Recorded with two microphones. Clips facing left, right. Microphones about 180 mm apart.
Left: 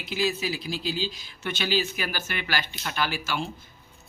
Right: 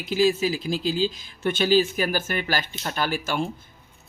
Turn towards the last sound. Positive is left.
turn(degrees=-50)  # may be behind; listen again after turning